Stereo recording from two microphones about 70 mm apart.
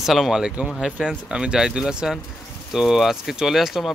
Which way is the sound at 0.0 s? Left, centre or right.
Centre.